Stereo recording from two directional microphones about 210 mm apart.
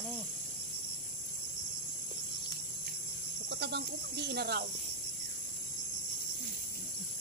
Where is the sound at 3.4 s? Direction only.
55° right (ahead or behind).